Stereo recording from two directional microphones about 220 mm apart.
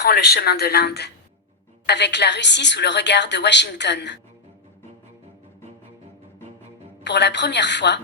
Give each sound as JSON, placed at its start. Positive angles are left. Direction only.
{"t": 0.0, "sound": "a woman's voice", "side_deg": 45}
{"t": 7.0, "sound": "a woman's voice", "side_deg": 50}